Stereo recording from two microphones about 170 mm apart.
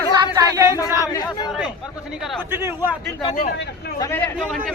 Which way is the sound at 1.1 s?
25° left (ahead or behind).